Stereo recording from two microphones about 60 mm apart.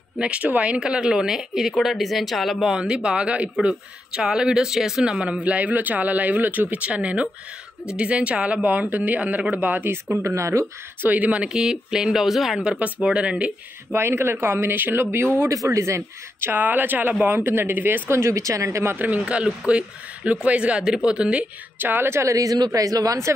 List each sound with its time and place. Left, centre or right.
0.2 s speech: right; by 2.7 s centre
2.7 s speech: centre
5.2 s speech: right
10.2 s speech: right
11.0 s speech: right; by 12.6 s centre
13.0 s speech: centre
13.9 s speech: right
15.5 s speech: right
16.4 s speech: right
18.1 s speech: right
18.9 s speech: right
21.7 s speech: right
22.1 s a woman's voice: right